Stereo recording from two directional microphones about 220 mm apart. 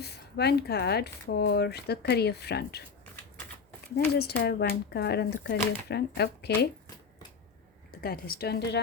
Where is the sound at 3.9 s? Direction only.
45° left (ahead or behind).